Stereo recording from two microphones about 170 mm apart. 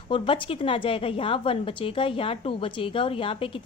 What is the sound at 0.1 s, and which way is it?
A woman's voice, 30° left (ahead or behind).